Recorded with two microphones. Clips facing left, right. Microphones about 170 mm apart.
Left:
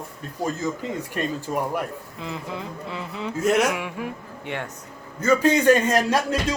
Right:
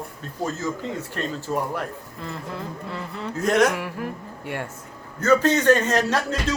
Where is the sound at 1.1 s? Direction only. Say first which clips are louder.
Left 1 dB; 15° left (ahead or behind).